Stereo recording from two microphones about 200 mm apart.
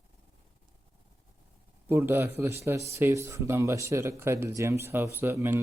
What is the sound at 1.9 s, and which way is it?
Speech, 10° right (ahead or behind).